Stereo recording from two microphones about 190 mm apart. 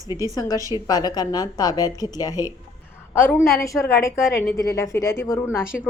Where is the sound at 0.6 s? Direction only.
15° right (ahead or behind).